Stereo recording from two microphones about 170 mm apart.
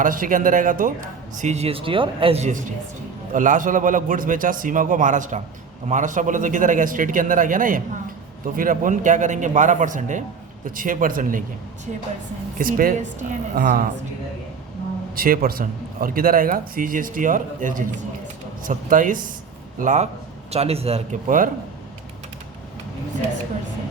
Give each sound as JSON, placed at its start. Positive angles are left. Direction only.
{"t": 0.0, "sound": "speech", "side_deg": -55}
{"t": 3.3, "sound": "speech", "side_deg": -50}
{"t": 12.5, "sound": "speech", "side_deg": -55}
{"t": 15.1, "sound": "a man's voice", "side_deg": -60}